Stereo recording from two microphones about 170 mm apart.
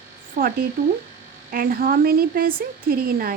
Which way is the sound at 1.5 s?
60° right (ahead or behind).